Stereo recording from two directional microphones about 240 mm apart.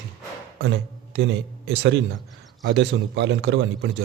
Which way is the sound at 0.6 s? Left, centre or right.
Right.